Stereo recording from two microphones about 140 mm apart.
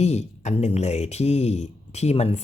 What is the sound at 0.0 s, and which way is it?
Speech, 50° left (ahead or behind).